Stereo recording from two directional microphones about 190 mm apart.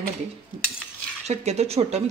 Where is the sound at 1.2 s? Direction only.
35° right (ahead or behind).